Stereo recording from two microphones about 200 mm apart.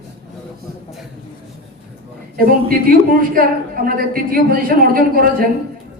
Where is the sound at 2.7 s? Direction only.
45° right (ahead or behind).